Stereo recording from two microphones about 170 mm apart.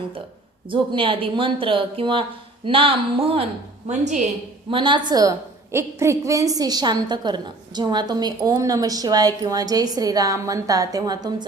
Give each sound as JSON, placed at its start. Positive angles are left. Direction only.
{"t": 0.7, "sound": "speech", "side_deg": -30}
{"t": 4.7, "sound": "a woman's voice", "side_deg": -30}